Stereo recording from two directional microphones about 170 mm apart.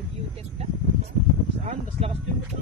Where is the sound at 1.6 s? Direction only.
40° right (ahead or behind).